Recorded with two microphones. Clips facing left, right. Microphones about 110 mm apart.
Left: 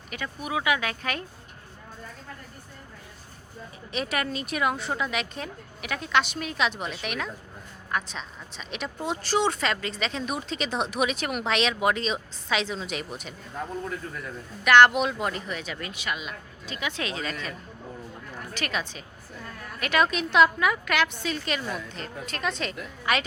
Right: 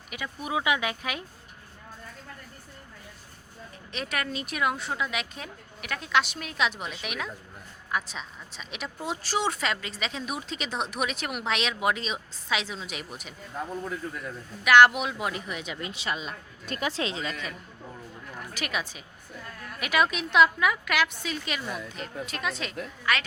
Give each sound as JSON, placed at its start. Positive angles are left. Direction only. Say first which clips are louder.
{"t": 0.1, "sound": "speech", "louder": "left 2 dB", "side_deg": -10}
{"t": 0.4, "sound": "a woman's voice", "louder": "even", "side_deg": -20}
{"t": 3.9, "sound": "speech", "louder": "left 3 dB", "side_deg": 5}
{"t": 14.6, "sound": "speech", "louder": "left 1 dB", "side_deg": -5}
{"t": 16.6, "sound": "speech", "louder": "right 2 dB", "side_deg": -45}
{"t": 16.9, "sound": "a woman's voice", "louder": "right 1 dB", "side_deg": -25}
{"t": 18.5, "sound": "speech", "louder": "left 2 dB", "side_deg": -10}